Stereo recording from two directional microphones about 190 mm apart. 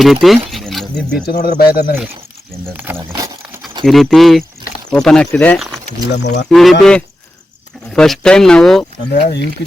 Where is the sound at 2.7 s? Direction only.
10° right (ahead or behind).